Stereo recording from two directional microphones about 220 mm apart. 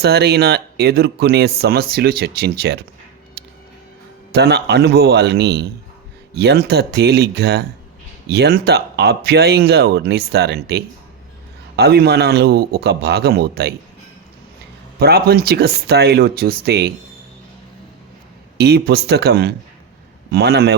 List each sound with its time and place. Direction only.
0.0 s speech: 50° right (ahead or behind)
3.4 s music: 50° right (ahead or behind)
4.3 s speech: 50° right (ahead or behind)
14.9 s speech: 45° right (ahead or behind)
18.5 s speech: 45° right (ahead or behind)